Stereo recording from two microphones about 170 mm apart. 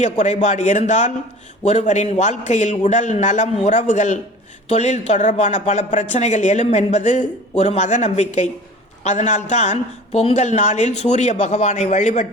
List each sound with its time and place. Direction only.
0.0 s speech: 45° left (ahead or behind)